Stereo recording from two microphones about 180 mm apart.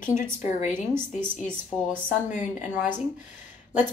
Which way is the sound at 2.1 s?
45° left (ahead or behind).